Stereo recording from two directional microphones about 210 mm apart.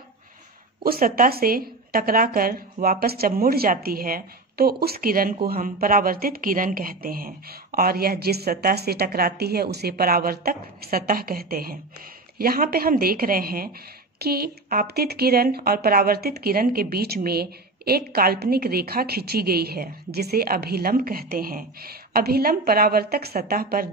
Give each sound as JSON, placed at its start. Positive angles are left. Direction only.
{"t": 0.8, "sound": "speech", "side_deg": -45}